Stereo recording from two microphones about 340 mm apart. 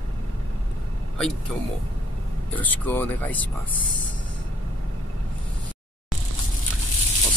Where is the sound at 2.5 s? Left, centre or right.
Centre.